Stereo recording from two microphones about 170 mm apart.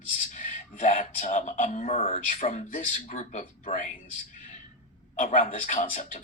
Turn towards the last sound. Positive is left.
turn(degrees=50)  # may be behind; listen again after turning